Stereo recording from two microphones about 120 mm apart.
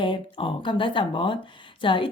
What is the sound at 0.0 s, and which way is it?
A woman's voice, 45° left (ahead or behind).